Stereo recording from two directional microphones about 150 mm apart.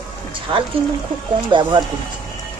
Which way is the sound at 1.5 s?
35° right (ahead or behind).